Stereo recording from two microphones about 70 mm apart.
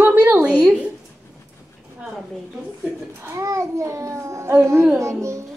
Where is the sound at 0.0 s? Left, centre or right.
Right.